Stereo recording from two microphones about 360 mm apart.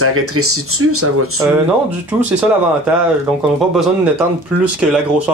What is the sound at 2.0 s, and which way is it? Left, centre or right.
Speech, centre.